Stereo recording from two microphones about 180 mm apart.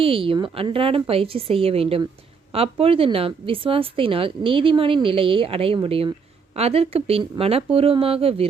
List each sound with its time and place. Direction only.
0.0 s a woman's voice: 30° right (ahead or behind)